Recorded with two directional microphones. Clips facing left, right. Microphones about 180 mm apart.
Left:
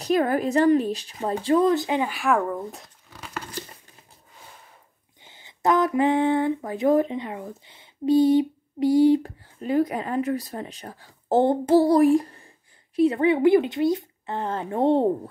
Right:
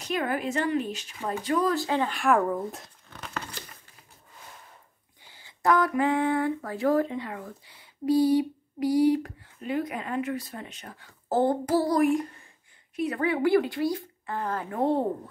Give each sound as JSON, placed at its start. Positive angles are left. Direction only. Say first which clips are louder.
{"t": 0.0, "sound": "speech", "louder": "left 7 dB", "side_deg": 40}
{"t": 2.1, "sound": "speech", "louder": "even", "side_deg": 0}
{"t": 5.2, "sound": "a sound", "louder": "left 3 dB", "side_deg": 20}
{"t": 9.6, "sound": "speech", "louder": "left 7 dB", "side_deg": 40}